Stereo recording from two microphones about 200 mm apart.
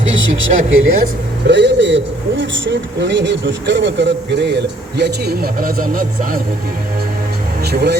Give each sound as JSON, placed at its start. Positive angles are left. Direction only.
{"t": 0.2, "sound": "speech", "side_deg": -75}
{"t": 1.0, "sound": "a man's voice", "side_deg": -60}
{"t": 7.6, "sound": "speech", "side_deg": -55}